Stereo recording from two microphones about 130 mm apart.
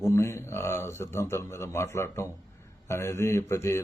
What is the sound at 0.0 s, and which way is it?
A man's voice, 20° left (ahead or behind).